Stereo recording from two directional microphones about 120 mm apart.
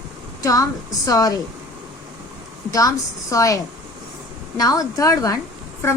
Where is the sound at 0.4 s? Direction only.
30° left (ahead or behind).